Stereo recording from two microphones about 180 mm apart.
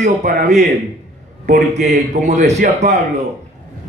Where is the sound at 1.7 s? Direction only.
40° right (ahead or behind).